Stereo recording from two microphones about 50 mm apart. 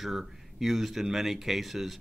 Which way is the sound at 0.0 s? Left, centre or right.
Centre.